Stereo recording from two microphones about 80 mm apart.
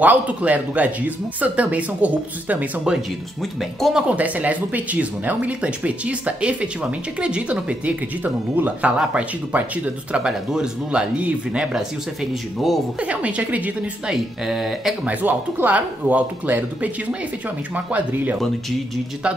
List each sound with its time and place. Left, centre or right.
0.0 s speech: centre
13.0 s speech: centre
14.1 s speech: centre
15.0 s speech: right